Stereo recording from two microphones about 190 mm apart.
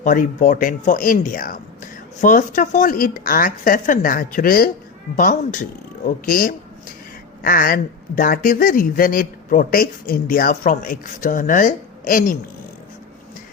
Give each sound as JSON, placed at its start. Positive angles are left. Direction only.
{"t": 0.0, "sound": "speech", "side_deg": 45}